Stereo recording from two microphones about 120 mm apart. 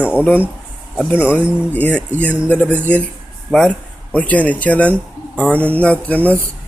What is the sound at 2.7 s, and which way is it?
Speech, 10° left (ahead or behind).